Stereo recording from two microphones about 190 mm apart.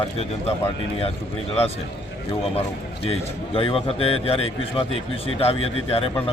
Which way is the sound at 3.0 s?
30° left (ahead or behind).